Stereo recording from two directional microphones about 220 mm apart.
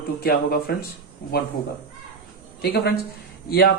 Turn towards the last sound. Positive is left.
turn(degrees=45)  # may be behind; listen again after turning